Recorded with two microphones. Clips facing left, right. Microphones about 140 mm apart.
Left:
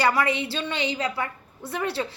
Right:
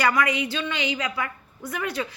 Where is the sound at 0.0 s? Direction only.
30° left (ahead or behind).